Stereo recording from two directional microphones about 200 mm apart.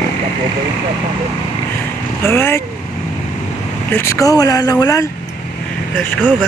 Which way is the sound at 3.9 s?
15° left (ahead or behind).